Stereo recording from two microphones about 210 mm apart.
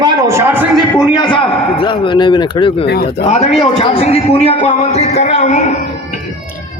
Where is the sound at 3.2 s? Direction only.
30° left (ahead or behind).